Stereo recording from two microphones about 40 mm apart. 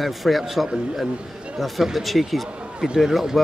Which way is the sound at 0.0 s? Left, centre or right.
Centre.